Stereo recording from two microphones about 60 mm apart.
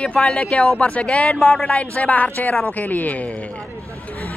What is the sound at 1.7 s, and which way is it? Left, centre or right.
Speech, left.